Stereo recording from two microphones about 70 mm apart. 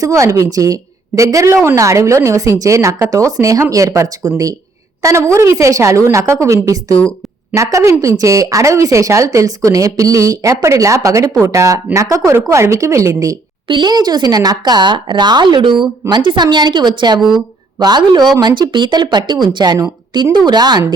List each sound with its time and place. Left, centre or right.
0.0 s a woman's voice: right
5.0 s a woman's voice: right
13.8 s speech: right
17.2 s speech: centre
17.7 s a woman's voice: right